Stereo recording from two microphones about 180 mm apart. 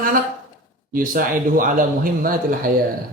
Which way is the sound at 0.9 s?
50° right (ahead or behind).